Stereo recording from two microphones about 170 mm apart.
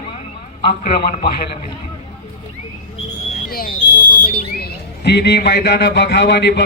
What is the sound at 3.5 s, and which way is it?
Speech, 60° left (ahead or behind).